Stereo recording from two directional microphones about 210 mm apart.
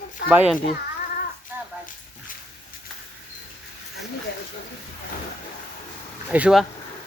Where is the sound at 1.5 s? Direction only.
10° right (ahead or behind).